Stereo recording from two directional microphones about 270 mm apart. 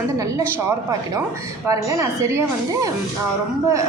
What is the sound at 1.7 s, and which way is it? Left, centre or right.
A woman's voice, centre.